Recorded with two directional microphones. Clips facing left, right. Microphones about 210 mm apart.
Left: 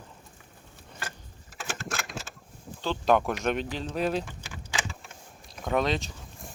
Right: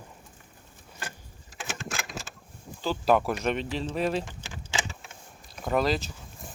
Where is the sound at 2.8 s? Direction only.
5° right (ahead or behind).